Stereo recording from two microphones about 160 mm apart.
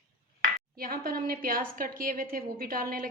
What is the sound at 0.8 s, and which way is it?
A woman's voice, 65° right (ahead or behind).